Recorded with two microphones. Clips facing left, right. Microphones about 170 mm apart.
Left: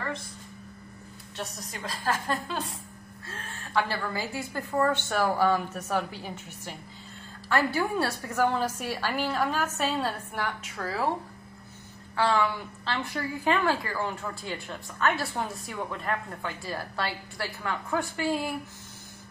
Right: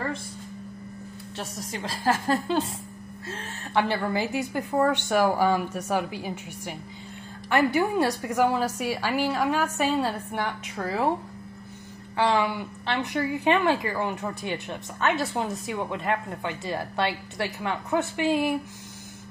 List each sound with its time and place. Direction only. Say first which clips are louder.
1.3 s a woman's voice: right 3 dB; 30° right (ahead or behind)
12.2 s a woman's voice: right 2 dB; 20° right (ahead or behind)